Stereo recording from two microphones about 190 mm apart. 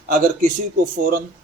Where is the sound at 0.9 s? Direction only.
40° right (ahead or behind).